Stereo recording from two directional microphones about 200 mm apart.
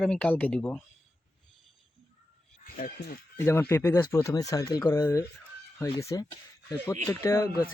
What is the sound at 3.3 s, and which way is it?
Speech, 10° left (ahead or behind).